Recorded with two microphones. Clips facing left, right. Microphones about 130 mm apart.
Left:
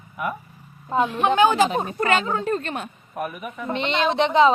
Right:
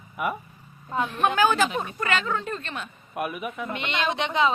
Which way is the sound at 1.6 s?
40° left (ahead or behind).